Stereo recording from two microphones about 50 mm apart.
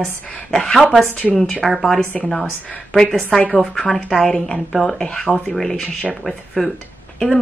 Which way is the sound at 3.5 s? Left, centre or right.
Centre.